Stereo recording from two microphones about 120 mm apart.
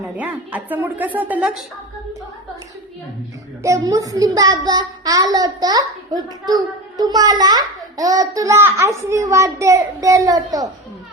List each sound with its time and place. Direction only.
0.2 s a woman's voice: 15° right (ahead or behind)
3.6 s a child's voice: 30° right (ahead or behind)